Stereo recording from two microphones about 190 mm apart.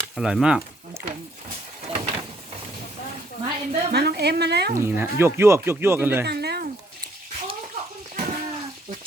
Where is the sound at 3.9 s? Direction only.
55° right (ahead or behind).